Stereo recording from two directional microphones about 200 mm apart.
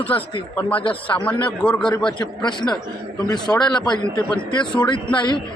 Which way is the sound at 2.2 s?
20° left (ahead or behind).